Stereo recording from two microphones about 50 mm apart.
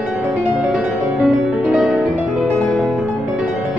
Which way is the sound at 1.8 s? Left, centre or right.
Right.